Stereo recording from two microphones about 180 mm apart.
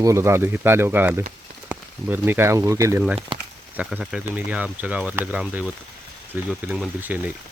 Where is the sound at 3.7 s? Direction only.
5° right (ahead or behind).